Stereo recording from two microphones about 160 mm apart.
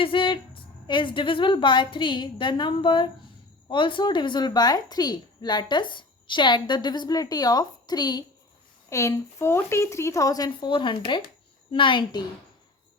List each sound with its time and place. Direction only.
0.0 s a woman's voice: 30° left (ahead or behind)